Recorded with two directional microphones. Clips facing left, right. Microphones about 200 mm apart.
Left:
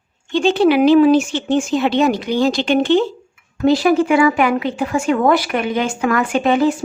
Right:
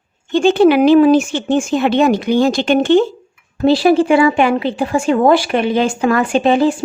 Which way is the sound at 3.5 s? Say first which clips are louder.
Right 2 dB; 30° right (ahead or behind).